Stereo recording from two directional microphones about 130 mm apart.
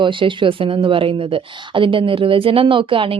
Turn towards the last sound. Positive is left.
turn(degrees=-40)  # may be behind; listen again after turning